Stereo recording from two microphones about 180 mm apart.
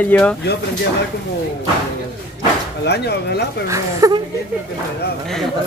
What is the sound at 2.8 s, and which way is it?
Speech, 65° left (ahead or behind).